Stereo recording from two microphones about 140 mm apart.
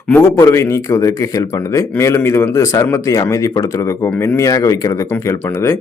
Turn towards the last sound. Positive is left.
turn(degrees=20)  # may be behind; listen again after turning